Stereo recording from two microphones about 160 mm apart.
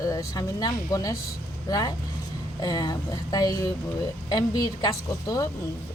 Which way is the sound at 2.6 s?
25° left (ahead or behind).